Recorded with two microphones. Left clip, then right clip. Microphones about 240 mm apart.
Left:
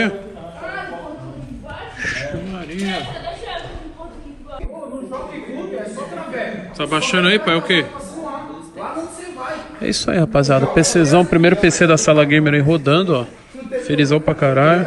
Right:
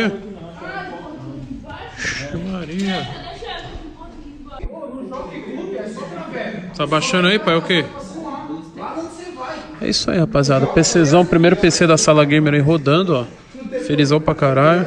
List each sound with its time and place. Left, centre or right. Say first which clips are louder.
2.0 s a sound: left 1 dB; right
6.8 s a man's voice: even; centre
9.8 s a man's voice: even; centre
11.7 s a man's voice: even; right